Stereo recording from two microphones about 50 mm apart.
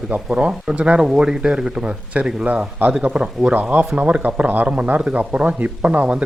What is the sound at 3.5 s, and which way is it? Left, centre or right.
Speech, right.